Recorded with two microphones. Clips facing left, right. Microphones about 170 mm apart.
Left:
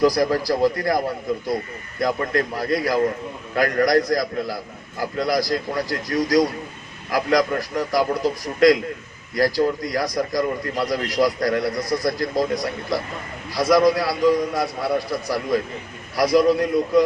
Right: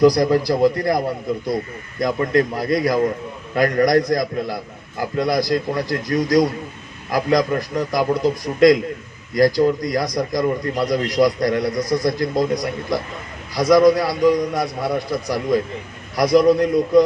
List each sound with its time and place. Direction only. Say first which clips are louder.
0.0 s a man's voice: right 4 dB; 20° right (ahead or behind)
2.0 s a man's voice: right 4 dB; 20° right (ahead or behind)